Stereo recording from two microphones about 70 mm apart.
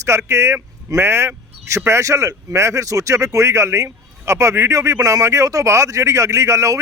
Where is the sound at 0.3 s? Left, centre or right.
Right.